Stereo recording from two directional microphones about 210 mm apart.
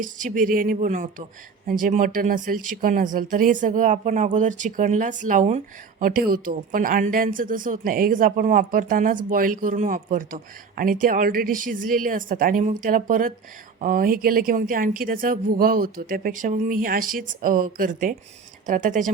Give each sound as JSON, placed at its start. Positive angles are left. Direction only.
{"t": 0.0, "sound": "speech", "side_deg": -40}